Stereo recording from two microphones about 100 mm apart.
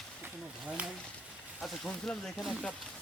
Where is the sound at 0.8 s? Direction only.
10° right (ahead or behind).